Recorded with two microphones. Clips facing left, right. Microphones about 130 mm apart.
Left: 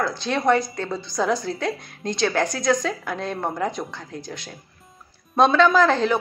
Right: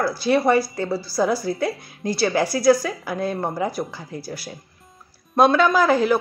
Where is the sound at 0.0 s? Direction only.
10° right (ahead or behind).